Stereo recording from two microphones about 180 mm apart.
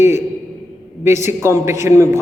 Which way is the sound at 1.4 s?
15° right (ahead or behind).